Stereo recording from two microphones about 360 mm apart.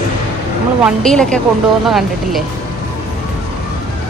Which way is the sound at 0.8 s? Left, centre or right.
Centre.